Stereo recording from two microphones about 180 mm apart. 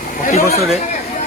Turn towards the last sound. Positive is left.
turn(degrees=40)  # may be behind; listen again after turning